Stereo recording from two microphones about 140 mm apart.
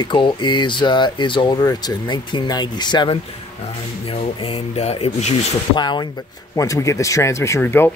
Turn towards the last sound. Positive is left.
turn(degrees=15)  # may be behind; listen again after turning